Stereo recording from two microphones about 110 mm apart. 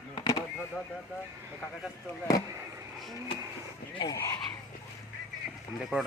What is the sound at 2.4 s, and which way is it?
Speech, 30° right (ahead or behind).